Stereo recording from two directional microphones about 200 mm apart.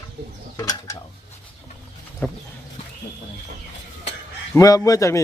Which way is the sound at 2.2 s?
10° left (ahead or behind).